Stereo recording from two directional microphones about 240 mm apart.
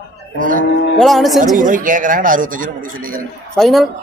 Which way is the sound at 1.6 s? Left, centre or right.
Right.